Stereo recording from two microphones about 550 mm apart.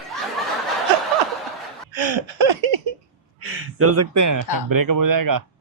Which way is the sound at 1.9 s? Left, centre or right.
Right.